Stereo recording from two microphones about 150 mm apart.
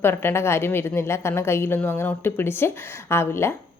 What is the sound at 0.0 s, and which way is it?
A woman's voice, 15° left (ahead or behind).